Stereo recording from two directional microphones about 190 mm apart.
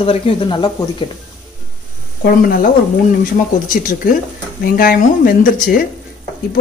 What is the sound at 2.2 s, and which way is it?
Speech, 50° left (ahead or behind).